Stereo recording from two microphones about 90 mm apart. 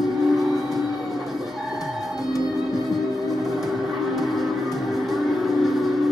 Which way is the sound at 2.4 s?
Centre (ahead or behind).